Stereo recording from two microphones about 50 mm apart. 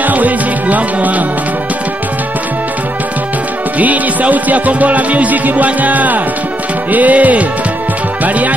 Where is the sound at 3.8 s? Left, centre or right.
Right.